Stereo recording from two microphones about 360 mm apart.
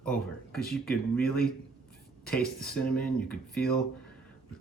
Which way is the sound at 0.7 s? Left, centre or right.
Centre.